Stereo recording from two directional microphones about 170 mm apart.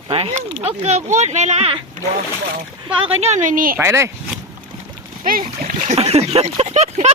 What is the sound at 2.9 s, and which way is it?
Speech, 35° right (ahead or behind).